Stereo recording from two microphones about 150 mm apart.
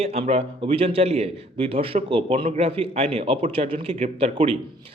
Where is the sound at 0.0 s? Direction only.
40° right (ahead or behind).